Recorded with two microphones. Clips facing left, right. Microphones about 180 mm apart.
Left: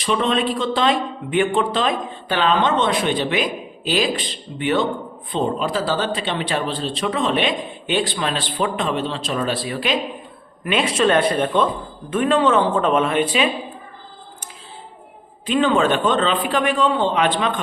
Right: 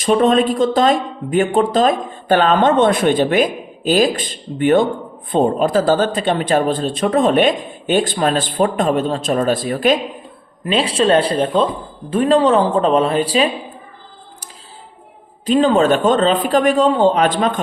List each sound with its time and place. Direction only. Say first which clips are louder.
0.0 s a man's voice: right 7 dB; 45° right (ahead or behind)
10.6 s a man's voice: right 2 dB; 30° right (ahead or behind)
15.4 s a man's voice: right 4 dB; 40° right (ahead or behind)